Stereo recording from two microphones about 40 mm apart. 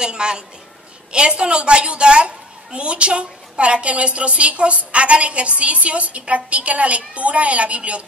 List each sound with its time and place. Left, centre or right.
0.0 s a woman's voice: right